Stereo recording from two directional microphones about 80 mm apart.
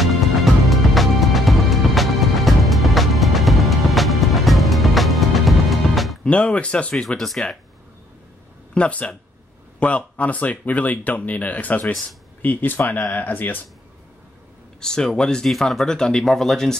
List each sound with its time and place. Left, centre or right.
0.7 s music: centre
6.2 s speech: centre
7.1 s speech: centre
8.7 s speech: centre
14.8 s speech: centre